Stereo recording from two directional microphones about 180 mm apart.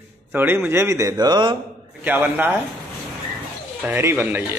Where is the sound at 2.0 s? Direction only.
10° right (ahead or behind).